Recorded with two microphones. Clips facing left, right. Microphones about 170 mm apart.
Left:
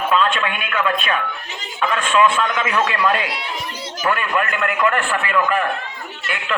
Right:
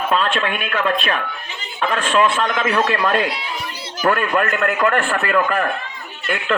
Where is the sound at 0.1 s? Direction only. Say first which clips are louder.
Left 1 dB; 40° right (ahead or behind).